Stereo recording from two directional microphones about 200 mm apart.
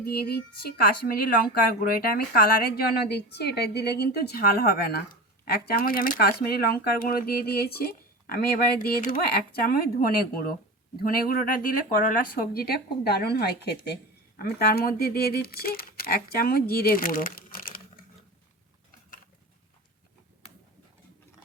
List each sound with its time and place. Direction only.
0.0 s speech: 50° left (ahead or behind)